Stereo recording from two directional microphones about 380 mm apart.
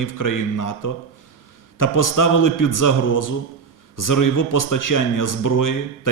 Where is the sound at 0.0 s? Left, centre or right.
Left.